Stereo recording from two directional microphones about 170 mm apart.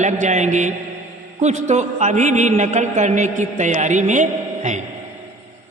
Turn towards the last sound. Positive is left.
turn(degrees=-45)  # may be behind; listen again after turning